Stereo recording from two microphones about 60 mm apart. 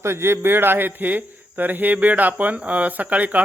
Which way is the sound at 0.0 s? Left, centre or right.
Right.